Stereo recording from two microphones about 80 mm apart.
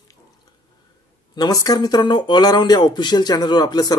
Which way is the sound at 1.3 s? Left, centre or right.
Left.